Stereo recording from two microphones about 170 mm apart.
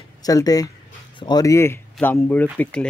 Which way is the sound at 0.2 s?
20° left (ahead or behind).